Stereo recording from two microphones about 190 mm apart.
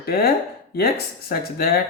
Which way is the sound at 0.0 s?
55° left (ahead or behind).